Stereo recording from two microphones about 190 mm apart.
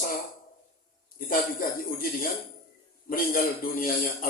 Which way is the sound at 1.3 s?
50° left (ahead or behind).